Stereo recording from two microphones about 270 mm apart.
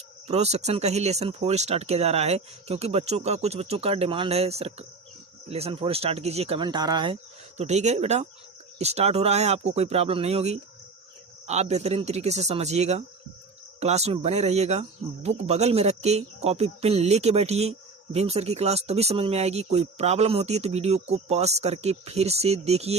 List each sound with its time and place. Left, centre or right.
0.3 s speech: right